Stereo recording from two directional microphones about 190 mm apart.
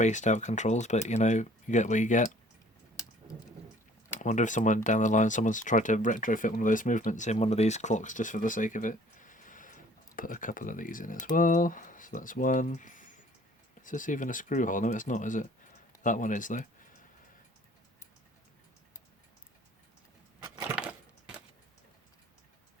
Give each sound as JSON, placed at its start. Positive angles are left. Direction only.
{"t": 0.0, "sound": "speech", "side_deg": 40}
{"t": 4.2, "sound": "speech", "side_deg": 40}
{"t": 20.6, "sound": "a sound", "side_deg": -5}